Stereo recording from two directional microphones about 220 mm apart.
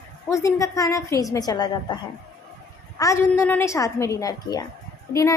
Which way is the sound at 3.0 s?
15° left (ahead or behind).